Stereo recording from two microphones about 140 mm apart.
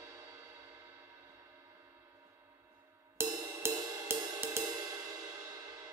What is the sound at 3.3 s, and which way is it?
Music, 25° right (ahead or behind).